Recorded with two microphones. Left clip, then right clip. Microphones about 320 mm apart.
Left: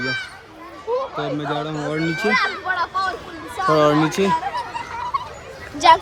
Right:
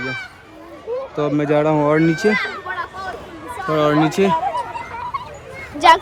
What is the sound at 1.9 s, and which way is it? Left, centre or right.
Speech, centre.